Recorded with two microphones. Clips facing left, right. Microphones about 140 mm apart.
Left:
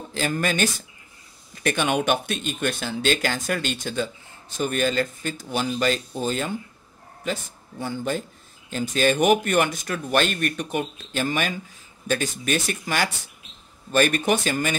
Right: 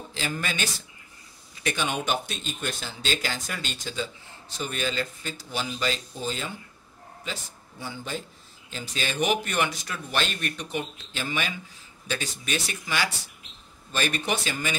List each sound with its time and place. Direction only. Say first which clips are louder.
0.1 s speech: left 7 dB; 50° left (ahead or behind)
7.8 s speech: left 8 dB; 50° left (ahead or behind)